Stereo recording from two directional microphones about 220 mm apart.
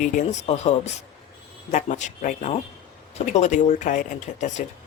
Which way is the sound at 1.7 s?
35° left (ahead or behind).